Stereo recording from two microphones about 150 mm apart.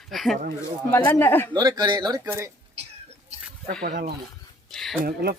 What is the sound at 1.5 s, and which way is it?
Speech, 30° right (ahead or behind).